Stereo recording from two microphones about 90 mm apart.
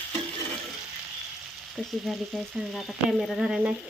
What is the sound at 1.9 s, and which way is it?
Frying, centre (ahead or behind).